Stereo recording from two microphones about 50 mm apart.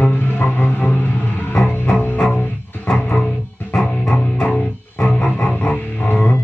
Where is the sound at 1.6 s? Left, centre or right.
Left.